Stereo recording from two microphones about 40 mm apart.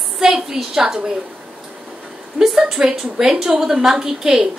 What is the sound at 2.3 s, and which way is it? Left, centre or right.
A woman's voice, centre.